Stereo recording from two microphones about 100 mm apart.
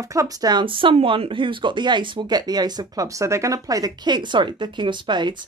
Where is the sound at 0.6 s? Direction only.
60° right (ahead or behind).